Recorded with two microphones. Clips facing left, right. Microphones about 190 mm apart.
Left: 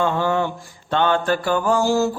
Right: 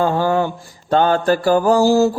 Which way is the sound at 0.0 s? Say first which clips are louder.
Right 3 dB; 40° right (ahead or behind).